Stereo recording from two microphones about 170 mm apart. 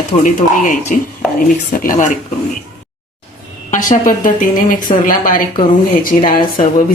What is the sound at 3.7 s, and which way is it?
Speech, 50° left (ahead or behind).